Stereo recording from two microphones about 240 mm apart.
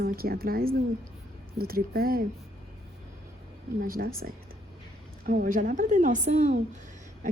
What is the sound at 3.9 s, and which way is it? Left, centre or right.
Speech, right.